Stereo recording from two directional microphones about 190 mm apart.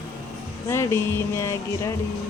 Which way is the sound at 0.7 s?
15° left (ahead or behind).